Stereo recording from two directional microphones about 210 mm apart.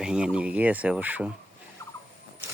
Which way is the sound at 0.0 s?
5° right (ahead or behind).